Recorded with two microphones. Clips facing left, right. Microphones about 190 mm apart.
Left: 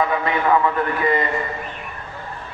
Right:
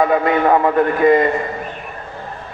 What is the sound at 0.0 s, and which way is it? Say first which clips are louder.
A man's voice: right 6 dB; 45° right (ahead or behind).